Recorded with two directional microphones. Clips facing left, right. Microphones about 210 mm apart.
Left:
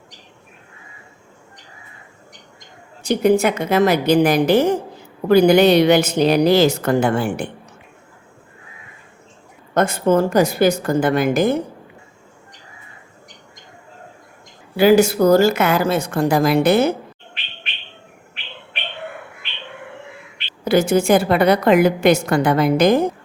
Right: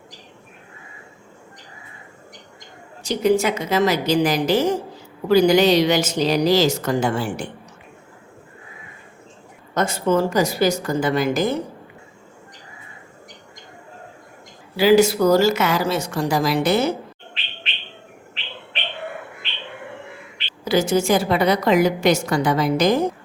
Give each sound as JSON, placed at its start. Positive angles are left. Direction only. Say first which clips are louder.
{"t": 3.0, "sound": "a woman's voice", "louder": "left 3 dB", "side_deg": 55}
{"t": 9.7, "sound": "a woman's voice", "louder": "left 3 dB", "side_deg": 55}
{"t": 14.8, "sound": "a woman's voice", "louder": "left 2 dB", "side_deg": 50}
{"t": 20.7, "sound": "a woman's voice", "louder": "left 3 dB", "side_deg": 55}